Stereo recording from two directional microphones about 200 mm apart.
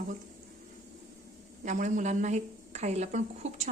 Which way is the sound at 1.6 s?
40° right (ahead or behind).